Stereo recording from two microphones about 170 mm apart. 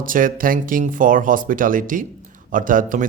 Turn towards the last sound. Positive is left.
turn(degrees=-50)  # may be behind; listen again after turning